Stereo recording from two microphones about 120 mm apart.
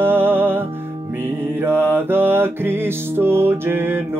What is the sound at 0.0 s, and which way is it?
Music, 20° right (ahead or behind).